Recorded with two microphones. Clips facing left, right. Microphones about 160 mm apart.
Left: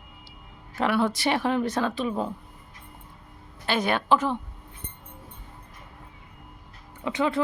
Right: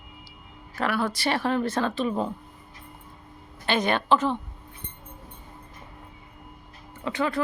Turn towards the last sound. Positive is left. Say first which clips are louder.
# left 1 dB
turn(degrees=20)  # may be behind; listen again after turning